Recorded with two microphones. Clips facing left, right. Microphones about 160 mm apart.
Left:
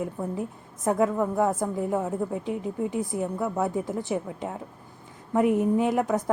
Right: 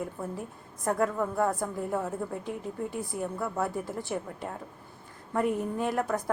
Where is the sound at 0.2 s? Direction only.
20° left (ahead or behind).